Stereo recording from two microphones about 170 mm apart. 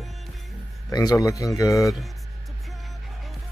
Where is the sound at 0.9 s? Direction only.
20° left (ahead or behind).